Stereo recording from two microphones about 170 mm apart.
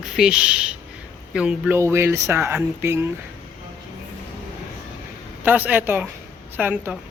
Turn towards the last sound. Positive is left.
turn(degrees=-10)  # may be behind; listen again after turning